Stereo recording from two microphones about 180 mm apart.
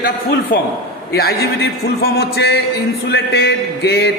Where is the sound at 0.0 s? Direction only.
55° left (ahead or behind).